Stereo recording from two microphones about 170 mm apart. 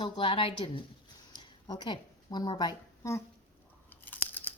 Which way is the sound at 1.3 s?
25° left (ahead or behind).